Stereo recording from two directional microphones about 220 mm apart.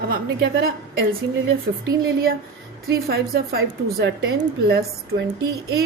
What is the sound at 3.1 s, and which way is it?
A woman's voice, 45° right (ahead or behind).